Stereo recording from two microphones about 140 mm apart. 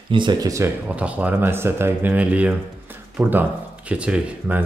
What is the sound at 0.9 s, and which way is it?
Speech, 10° right (ahead or behind).